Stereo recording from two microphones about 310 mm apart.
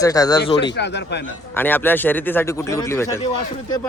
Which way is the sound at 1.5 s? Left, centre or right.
Centre.